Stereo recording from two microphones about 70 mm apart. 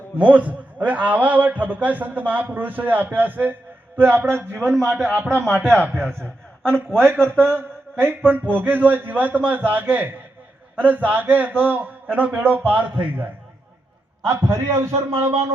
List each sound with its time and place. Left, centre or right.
0.2 s a man's voice: right
4.8 s a man's voice: centre
5.7 s a man's voice: right
7.3 s mantra: right
8.2 s a man's voice: right
14.3 s a man's voice: right